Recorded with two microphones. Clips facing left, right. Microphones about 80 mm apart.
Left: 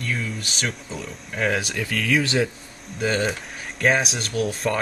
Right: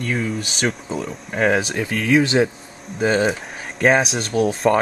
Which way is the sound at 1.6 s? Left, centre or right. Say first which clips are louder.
Right 4 dB; right.